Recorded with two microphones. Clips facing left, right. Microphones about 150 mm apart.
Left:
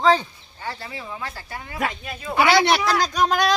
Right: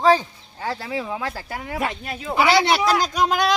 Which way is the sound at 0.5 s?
90° right.